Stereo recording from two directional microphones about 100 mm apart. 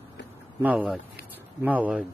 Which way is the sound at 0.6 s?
15° right (ahead or behind).